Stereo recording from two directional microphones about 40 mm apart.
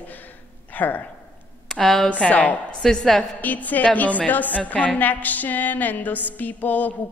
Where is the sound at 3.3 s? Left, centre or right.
Left.